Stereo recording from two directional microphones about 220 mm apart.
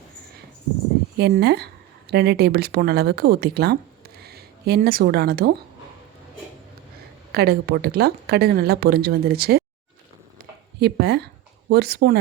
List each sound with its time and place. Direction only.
1.2 s a woman's voice: 50° right (ahead or behind)
7.3 s a woman's voice: 45° right (ahead or behind)
10.8 s a woman's voice: 50° right (ahead or behind)